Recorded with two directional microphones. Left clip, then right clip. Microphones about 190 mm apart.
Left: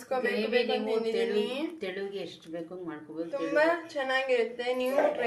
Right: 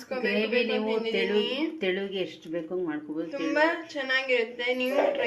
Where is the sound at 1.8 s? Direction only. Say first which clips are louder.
Right 6 dB; 35° right (ahead or behind).